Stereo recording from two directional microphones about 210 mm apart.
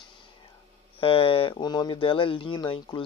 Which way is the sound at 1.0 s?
25° left (ahead or behind).